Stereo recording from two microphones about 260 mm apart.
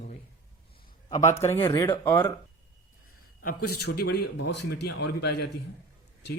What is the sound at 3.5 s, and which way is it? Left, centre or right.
Speech, left.